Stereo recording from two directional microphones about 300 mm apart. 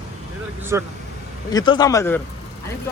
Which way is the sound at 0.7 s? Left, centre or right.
Centre.